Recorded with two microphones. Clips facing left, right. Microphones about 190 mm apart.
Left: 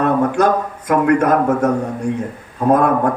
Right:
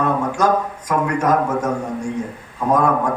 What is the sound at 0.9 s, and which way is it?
Speech, 60° left (ahead or behind).